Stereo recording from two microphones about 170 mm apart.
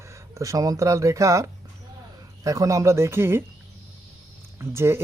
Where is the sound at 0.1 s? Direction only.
20° right (ahead or behind).